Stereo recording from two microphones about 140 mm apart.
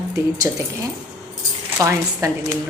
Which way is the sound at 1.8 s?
20° right (ahead or behind).